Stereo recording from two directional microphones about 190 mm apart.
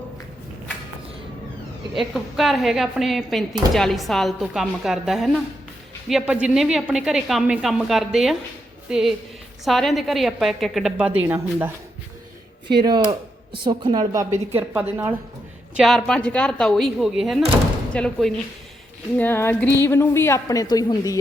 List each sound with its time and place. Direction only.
2.0 s a woman's voice: centre (ahead or behind)
12.8 s a woman's voice: 20° right (ahead or behind)
15.7 s a woman's voice: centre (ahead or behind); by 21.2 s 20° left (ahead or behind)